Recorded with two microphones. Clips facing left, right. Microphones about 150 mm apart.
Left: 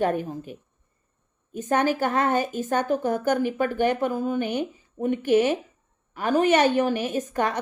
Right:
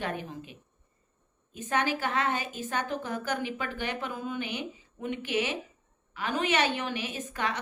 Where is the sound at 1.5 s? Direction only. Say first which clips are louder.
Left 7 dB; 45° left (ahead or behind).